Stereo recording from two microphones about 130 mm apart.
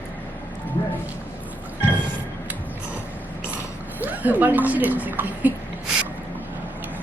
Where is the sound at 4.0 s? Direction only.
10° right (ahead or behind).